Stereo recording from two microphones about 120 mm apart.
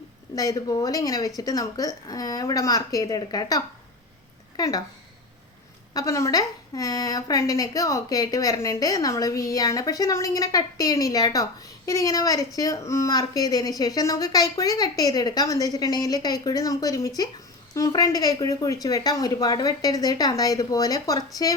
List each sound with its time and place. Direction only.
0.3 s a woman's voice: 30° left (ahead or behind)
5.9 s a woman's voice: 25° left (ahead or behind)